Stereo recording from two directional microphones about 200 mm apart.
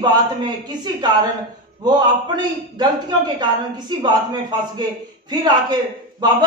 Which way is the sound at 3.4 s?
20° right (ahead or behind).